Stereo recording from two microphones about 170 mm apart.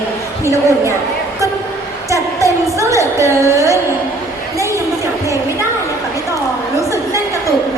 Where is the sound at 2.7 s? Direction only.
20° right (ahead or behind).